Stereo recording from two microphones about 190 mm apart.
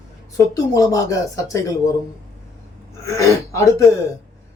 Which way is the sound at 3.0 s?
15° left (ahead or behind).